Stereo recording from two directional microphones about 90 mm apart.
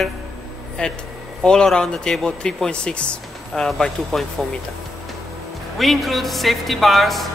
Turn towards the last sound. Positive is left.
turn(degrees=0)  # may be behind; listen again after turning